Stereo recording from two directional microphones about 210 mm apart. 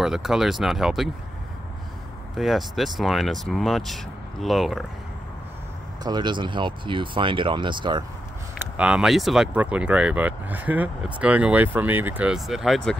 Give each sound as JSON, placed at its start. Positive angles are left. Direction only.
{"t": 0.0, "sound": "speech", "side_deg": 0}
{"t": 2.3, "sound": "speech", "side_deg": 0}
{"t": 6.0, "sound": "speech", "side_deg": -20}
{"t": 8.7, "sound": "speech", "side_deg": -5}